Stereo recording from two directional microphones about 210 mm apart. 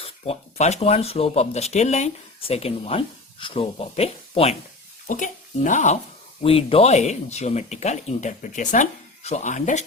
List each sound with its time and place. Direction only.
0.0 s speech: 30° left (ahead or behind)